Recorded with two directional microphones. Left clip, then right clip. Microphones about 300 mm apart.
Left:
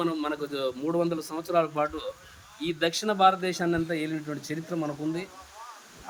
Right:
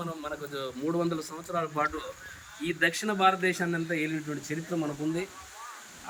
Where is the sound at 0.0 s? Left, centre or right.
Left.